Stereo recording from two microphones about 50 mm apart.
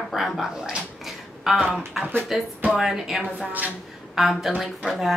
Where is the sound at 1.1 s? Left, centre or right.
Centre.